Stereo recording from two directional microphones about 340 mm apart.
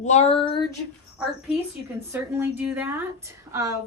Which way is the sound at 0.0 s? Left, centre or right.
Centre.